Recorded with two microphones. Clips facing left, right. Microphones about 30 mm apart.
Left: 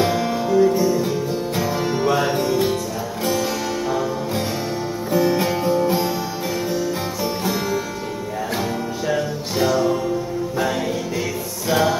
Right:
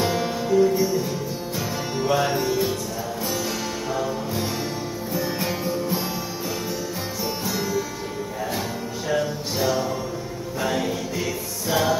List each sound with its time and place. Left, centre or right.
0.1 s music: centre
2.3 s music: left
5.7 s music: left
11.7 s music: centre